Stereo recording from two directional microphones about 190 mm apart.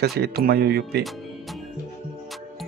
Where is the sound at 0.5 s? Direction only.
55° right (ahead or behind).